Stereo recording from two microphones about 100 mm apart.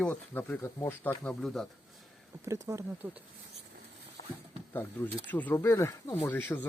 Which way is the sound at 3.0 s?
20° right (ahead or behind).